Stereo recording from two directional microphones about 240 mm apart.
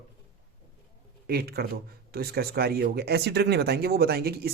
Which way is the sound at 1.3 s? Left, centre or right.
Right.